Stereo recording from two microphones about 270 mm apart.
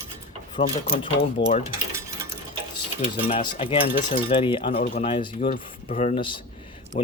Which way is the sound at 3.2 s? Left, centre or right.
Left.